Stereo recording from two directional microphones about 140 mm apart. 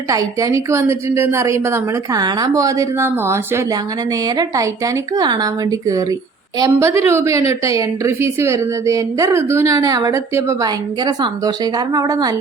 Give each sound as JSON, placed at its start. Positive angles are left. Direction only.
{"t": 0.1, "sound": "a woman's voice", "side_deg": -25}